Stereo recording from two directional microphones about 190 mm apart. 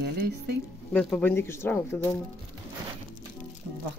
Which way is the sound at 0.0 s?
60° right (ahead or behind).